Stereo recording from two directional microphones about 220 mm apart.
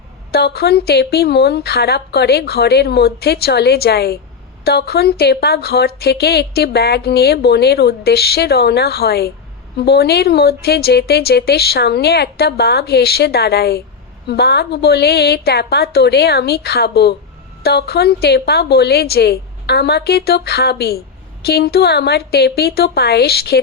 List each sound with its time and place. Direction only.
0.3 s a woman's voice: 45° left (ahead or behind)